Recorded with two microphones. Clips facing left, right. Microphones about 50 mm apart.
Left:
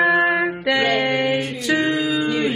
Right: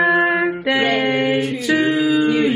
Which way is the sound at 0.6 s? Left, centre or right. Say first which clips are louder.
Right 1 dB; centre.